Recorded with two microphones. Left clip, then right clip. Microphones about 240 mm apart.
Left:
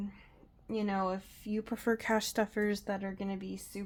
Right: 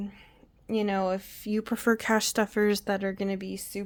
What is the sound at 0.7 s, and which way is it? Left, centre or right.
Speech, right.